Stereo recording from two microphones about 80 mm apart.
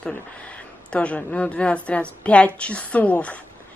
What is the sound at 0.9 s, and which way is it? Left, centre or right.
Speech, centre.